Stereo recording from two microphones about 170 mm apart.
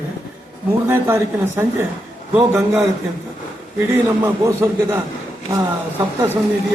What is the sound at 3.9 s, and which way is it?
A man's voice, 15° right (ahead or behind).